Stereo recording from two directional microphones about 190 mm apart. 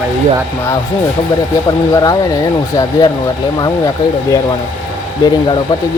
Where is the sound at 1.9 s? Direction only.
20° left (ahead or behind).